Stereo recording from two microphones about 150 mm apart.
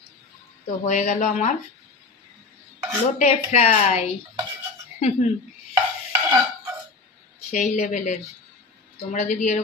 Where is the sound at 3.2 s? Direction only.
50° left (ahead or behind).